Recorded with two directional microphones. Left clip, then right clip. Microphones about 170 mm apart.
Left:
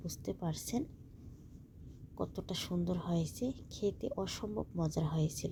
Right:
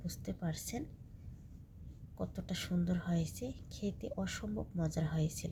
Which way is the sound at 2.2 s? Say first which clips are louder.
Left 3 dB; 15° left (ahead or behind).